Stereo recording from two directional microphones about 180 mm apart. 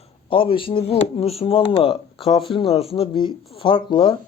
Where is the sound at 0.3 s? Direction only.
30° left (ahead or behind).